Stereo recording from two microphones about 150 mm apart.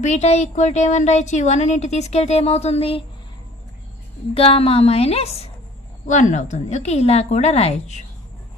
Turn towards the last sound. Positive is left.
turn(degrees=45)  # may be behind; listen again after turning